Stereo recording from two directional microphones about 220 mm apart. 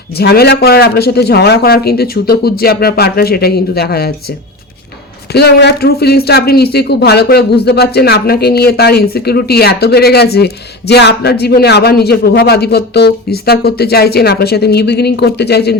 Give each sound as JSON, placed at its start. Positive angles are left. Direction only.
{"t": 0.2, "sound": "speech", "side_deg": 45}
{"t": 5.3, "sound": "speech", "side_deg": 45}